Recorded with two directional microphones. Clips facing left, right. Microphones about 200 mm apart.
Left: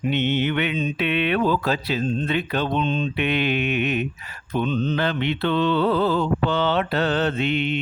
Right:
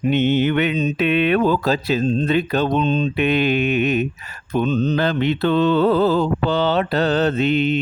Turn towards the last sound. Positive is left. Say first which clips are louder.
# right 5 dB
turn(degrees=-40)  # may be behind; listen again after turning